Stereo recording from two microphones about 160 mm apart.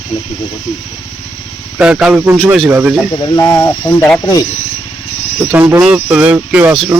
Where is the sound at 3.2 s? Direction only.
20° left (ahead or behind).